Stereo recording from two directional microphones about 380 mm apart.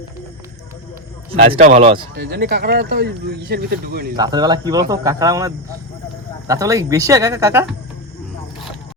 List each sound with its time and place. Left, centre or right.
1.3 s speech: centre
2.1 s speech: right
4.2 s speech: centre